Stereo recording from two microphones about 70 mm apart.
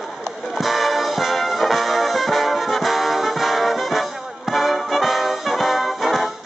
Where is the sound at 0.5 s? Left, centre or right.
Centre.